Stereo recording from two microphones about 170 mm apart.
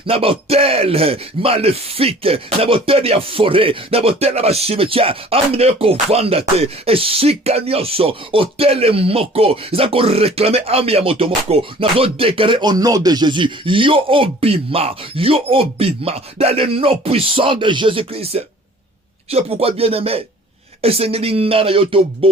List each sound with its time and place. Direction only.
0.1 s speech: 35° right (ahead or behind)